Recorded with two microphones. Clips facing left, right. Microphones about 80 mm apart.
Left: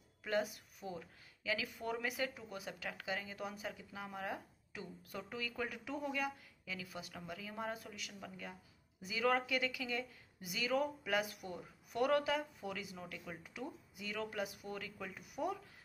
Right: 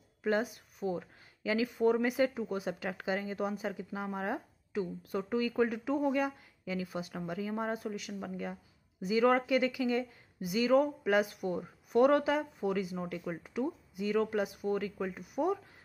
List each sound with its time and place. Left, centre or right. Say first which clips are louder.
0.2 s speech: right 6 dB; right